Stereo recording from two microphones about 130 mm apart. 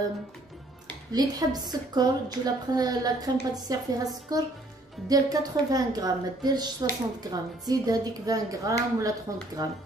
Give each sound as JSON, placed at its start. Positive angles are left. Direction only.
{"t": 1.1, "sound": "a woman's voice", "side_deg": -30}